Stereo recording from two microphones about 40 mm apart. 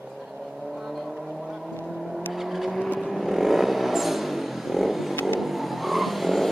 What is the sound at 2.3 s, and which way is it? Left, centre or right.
Vehicle, centre.